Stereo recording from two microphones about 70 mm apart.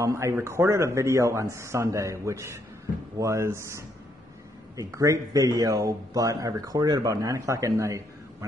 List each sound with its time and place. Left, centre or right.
0.0 s a man's voice: right